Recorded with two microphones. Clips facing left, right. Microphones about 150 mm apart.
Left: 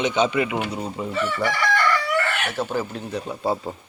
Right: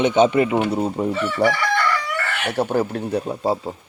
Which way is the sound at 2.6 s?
65° right (ahead or behind).